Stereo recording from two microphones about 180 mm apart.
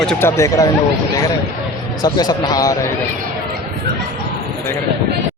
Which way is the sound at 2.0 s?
20° left (ahead or behind).